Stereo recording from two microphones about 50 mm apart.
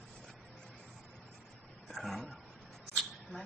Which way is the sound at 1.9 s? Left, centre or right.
Centre.